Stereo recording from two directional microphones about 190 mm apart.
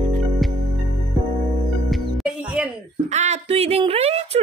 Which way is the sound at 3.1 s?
35° right (ahead or behind).